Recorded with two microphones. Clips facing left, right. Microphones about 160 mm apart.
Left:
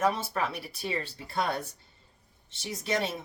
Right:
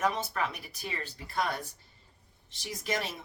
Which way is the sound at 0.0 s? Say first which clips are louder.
Left 3 dB; 30° left (ahead or behind).